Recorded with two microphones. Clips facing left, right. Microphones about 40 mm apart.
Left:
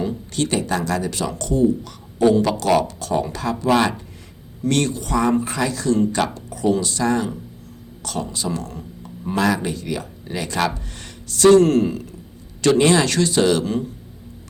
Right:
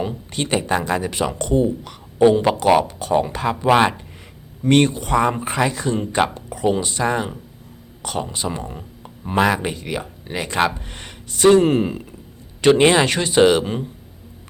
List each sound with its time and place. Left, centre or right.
0.0 s speech: right
12.6 s speech: right